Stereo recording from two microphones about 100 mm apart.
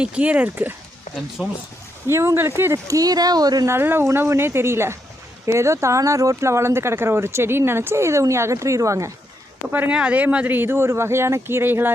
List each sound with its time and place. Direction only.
0.0 s speech: 10° right (ahead or behind)
1.4 s speech: 10° right (ahead or behind)
2.0 s speech: 25° right (ahead or behind)
3.7 s speech: 20° right (ahead or behind)
9.6 s speech: 15° right (ahead or behind)